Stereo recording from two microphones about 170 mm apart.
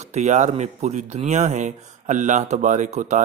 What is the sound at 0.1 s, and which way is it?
A man's voice, 45° right (ahead or behind).